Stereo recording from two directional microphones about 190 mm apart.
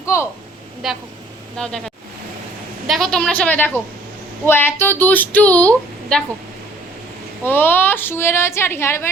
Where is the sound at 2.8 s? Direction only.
Centre (ahead or behind).